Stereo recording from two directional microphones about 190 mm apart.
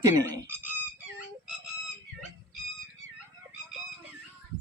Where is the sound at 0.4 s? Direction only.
10° right (ahead or behind).